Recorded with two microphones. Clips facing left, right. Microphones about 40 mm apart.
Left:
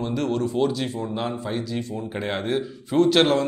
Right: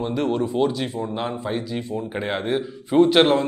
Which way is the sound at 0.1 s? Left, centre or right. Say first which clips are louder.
Right 1 dB; centre.